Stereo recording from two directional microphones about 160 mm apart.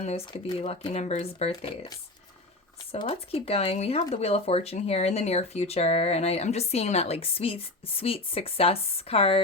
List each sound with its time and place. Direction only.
0.6 s speech: 40° left (ahead or behind)
3.1 s speech: 40° left (ahead or behind)